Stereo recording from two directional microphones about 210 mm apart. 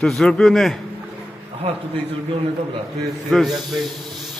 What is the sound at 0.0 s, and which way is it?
Speech, 5° left (ahead or behind).